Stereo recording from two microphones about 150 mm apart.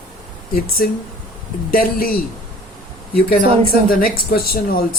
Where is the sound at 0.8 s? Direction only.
85° left.